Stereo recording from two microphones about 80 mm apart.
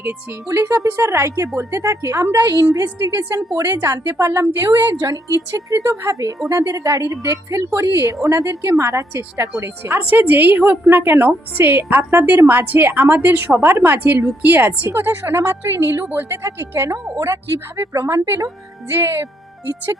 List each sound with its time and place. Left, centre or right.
0.0 s a woman's voice: right
0.4 s speech: right
3.3 s speech: right
3.8 s a woman's voice: right